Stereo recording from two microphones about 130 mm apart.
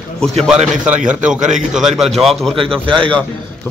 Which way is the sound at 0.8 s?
10° right (ahead or behind).